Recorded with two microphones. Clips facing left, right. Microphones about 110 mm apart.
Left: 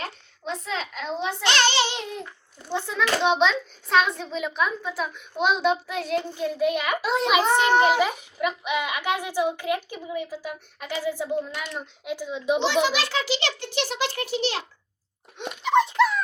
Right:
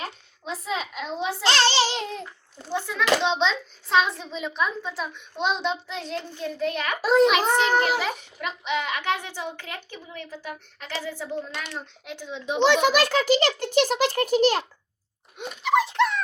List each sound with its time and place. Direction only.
0.0 s a child's voice: 5° right (ahead or behind)
1.4 s a child's voice: 35° right (ahead or behind)
2.7 s a child's voice: 20° left (ahead or behind)
3.3 s a child's voice: centre (ahead or behind)
7.0 s a child's voice: 40° right (ahead or behind)
7.3 s a child's voice: 5° left (ahead or behind)
12.5 s a child's voice: 60° right (ahead or behind)
15.4 s a child's voice: 5° right (ahead or behind)